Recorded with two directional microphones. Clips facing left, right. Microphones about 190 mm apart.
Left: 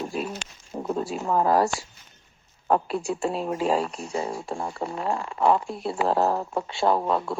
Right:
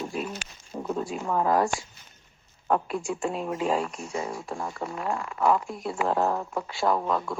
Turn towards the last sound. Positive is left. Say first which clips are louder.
# left 2 dB
turn(degrees=30)  # may be behind; listen again after turning